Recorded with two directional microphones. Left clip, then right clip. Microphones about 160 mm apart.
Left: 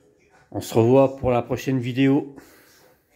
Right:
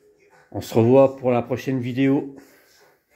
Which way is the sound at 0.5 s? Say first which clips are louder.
Right 1 dB; 15° left (ahead or behind).